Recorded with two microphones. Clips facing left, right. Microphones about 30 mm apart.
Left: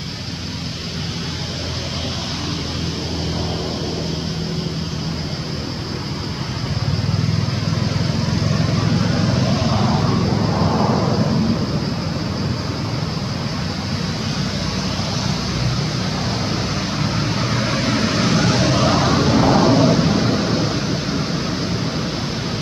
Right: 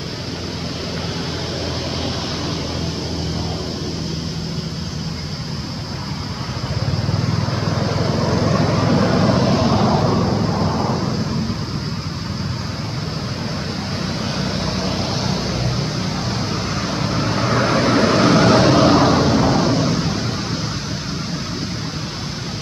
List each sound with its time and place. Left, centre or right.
7.6 s vehicle: centre
14.4 s vehicle: centre
15.6 s vehicle: centre